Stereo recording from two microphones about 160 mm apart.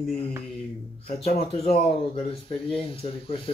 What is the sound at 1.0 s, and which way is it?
A man's voice, 40° left (ahead or behind).